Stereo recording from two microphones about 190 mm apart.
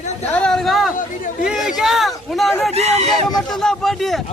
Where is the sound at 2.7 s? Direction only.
35° right (ahead or behind).